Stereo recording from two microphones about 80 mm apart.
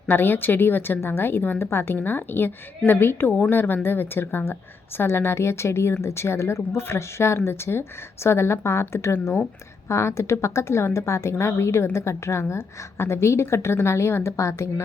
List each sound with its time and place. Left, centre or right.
0.1 s a woman's voice: left